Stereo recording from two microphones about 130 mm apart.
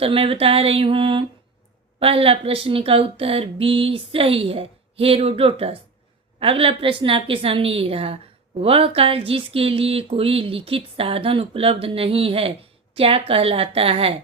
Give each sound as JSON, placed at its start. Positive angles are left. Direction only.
{"t": 0.0, "sound": "speech", "side_deg": -45}